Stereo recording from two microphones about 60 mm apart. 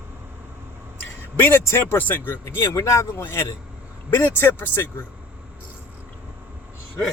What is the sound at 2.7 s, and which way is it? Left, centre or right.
Speech, left.